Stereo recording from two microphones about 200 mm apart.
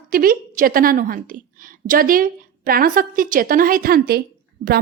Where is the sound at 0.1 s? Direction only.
45° right (ahead or behind).